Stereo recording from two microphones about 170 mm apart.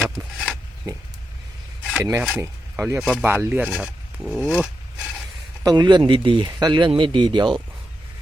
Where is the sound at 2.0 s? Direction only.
10° right (ahead or behind).